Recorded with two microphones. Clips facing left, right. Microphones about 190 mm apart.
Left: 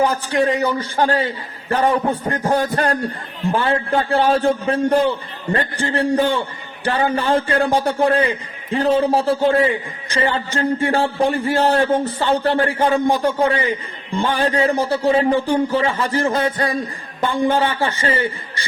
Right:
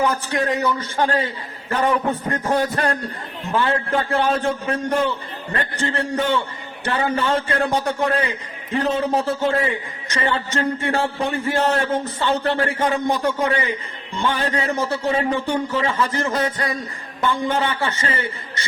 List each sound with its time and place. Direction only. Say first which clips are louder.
0.0 s a man's voice: left 4 dB; 30° left (ahead or behind)